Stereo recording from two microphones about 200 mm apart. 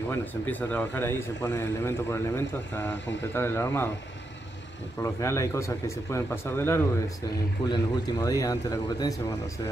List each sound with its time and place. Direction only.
0.1 s speech: 10° left (ahead or behind)
5.0 s speech: 15° left (ahead or behind)